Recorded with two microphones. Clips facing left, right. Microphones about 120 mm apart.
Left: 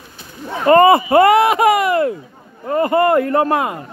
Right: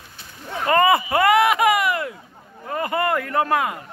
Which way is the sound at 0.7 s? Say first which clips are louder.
Left 8 dB; 35° left (ahead or behind).